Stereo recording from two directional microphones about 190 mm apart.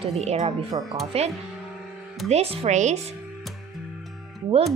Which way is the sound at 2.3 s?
30° right (ahead or behind).